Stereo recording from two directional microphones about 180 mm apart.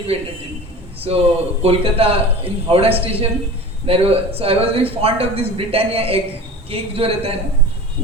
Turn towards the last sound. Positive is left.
turn(degrees=-35)  # may be behind; listen again after turning